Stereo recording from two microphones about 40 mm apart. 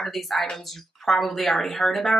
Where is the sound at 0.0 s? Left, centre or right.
Centre.